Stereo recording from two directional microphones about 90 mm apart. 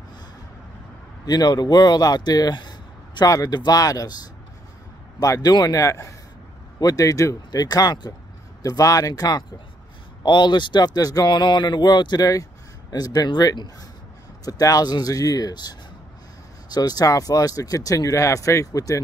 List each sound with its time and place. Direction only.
1.2 s speech: 50° left (ahead or behind)
5.2 s speech: 45° left (ahead or behind)
10.2 s speech: 60° left (ahead or behind); by 18.9 s 40° left (ahead or behind)